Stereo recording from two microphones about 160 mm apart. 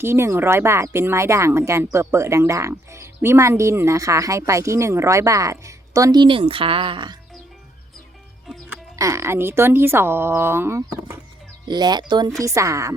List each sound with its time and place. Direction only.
0.0 s speech: 15° right (ahead or behind)
9.0 s speech: 20° right (ahead or behind)
11.7 s speech: 25° right (ahead or behind)